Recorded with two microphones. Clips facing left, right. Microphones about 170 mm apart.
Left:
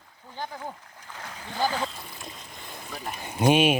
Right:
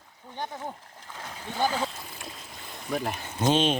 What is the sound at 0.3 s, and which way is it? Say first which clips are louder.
Speech: right 1 dB; 20° right (ahead or behind).